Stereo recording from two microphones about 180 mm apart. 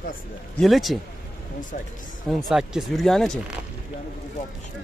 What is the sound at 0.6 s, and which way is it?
Speech, centre (ahead or behind).